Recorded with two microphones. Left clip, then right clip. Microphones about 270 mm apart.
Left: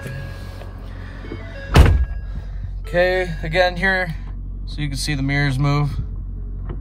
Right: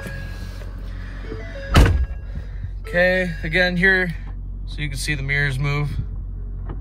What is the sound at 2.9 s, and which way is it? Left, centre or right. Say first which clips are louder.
Speech: even; centre.